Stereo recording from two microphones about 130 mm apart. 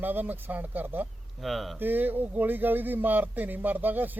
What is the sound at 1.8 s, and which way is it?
Speech, 15° right (ahead or behind).